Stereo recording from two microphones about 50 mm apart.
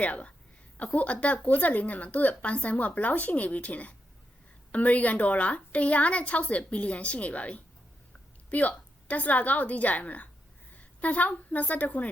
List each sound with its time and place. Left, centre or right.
0.0 s a woman's voice: left